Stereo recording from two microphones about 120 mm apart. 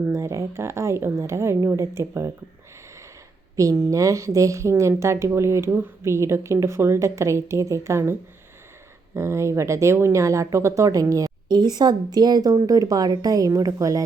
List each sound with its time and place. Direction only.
0.0 s speech: 25° right (ahead or behind)
3.5 s speech: 25° right (ahead or behind)
9.1 s speech: 25° right (ahead or behind)